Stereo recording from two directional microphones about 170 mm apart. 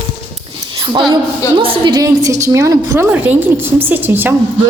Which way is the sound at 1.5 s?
30° right (ahead or behind).